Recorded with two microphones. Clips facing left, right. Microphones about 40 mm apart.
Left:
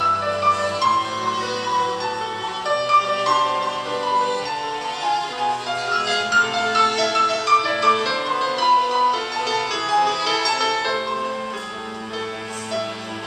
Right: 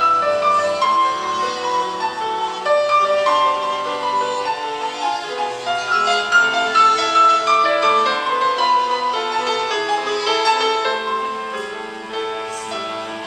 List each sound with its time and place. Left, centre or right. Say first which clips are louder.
0.0 s music: right 3 dB; centre
2.6 s music: right 3 dB; centre
6.8 s music: right 6 dB; centre
7.3 s music: right 3 dB; centre